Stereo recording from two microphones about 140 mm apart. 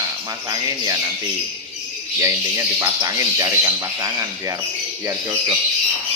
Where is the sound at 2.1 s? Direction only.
20° right (ahead or behind).